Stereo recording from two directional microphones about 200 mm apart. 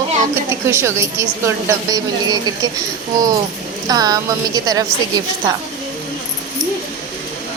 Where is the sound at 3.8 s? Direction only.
20° right (ahead or behind).